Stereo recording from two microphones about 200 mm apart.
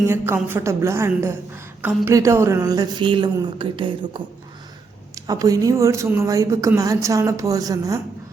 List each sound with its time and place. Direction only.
0.1 s speech: 10° right (ahead or behind)